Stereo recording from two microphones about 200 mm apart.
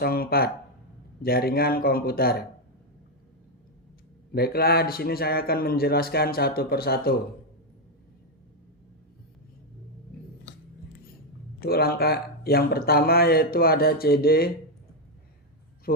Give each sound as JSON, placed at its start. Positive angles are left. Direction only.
{"t": 0.0, "sound": "speech", "side_deg": 50}
{"t": 4.3, "sound": "speech", "side_deg": 50}
{"t": 11.6, "sound": "speech", "side_deg": 50}